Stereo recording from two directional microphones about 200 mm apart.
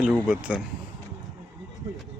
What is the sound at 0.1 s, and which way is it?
Speech, 5° right (ahead or behind).